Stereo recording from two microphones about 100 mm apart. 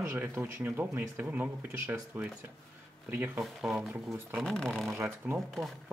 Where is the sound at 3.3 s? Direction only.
Centre (ahead or behind).